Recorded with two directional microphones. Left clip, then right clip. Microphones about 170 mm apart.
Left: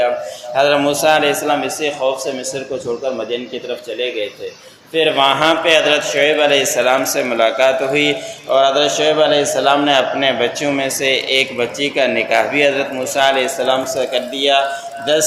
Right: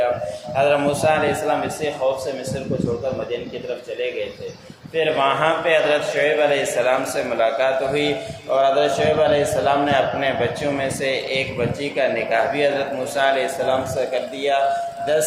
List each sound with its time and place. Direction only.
0.5 s a man's voice: 35° left (ahead or behind)
4.9 s a man's voice: 35° left (ahead or behind)